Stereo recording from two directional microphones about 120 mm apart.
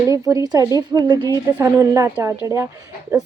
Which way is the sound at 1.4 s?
20° right (ahead or behind).